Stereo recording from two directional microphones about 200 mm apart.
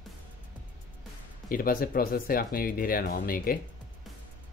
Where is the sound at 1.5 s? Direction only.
45° left (ahead or behind).